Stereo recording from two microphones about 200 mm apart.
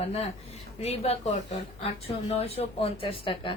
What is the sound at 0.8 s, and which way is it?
A woman's voice, 30° left (ahead or behind).